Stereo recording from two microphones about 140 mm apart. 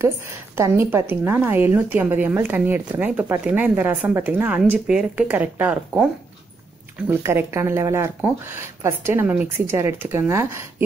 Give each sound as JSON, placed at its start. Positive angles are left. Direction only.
{"t": 0.6, "sound": "a woman's voice", "side_deg": -15}
{"t": 7.1, "sound": "a woman's voice", "side_deg": -15}